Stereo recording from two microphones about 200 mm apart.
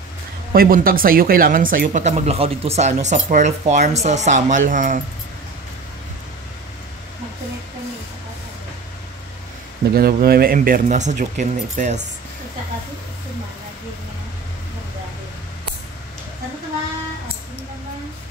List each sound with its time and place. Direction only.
0.5 s speech: 45° right (ahead or behind)
9.9 s speech: 50° right (ahead or behind)